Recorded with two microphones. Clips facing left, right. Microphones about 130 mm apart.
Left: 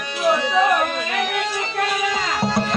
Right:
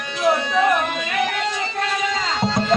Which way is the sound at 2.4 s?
10° left (ahead or behind).